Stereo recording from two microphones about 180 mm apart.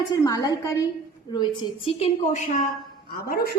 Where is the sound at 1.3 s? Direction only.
30° left (ahead or behind).